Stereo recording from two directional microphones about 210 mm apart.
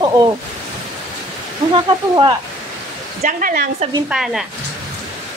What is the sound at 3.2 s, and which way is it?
Speech, 40° right (ahead or behind).